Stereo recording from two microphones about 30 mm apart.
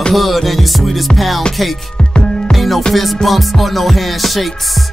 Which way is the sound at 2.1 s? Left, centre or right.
Left.